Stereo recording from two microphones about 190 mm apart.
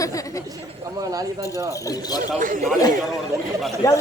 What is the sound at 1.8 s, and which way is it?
Speech, 20° left (ahead or behind).